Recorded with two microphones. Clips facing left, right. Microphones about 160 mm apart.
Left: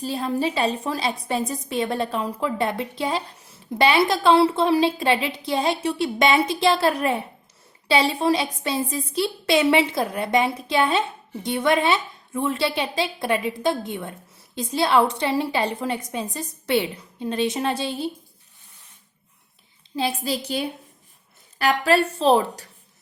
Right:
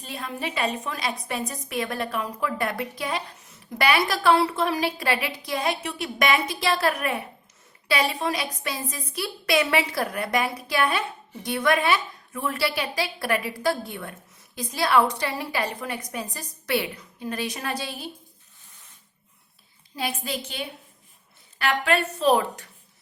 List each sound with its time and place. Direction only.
0.0 s a woman's voice: 35° left (ahead or behind)
20.0 s a woman's voice: 30° left (ahead or behind)